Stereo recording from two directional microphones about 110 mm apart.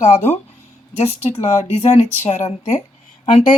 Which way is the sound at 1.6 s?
70° left (ahead or behind).